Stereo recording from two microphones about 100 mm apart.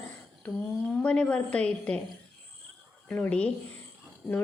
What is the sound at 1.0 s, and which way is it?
Speech, 10° left (ahead or behind).